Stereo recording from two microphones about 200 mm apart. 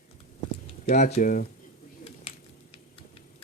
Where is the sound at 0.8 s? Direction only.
35° left (ahead or behind).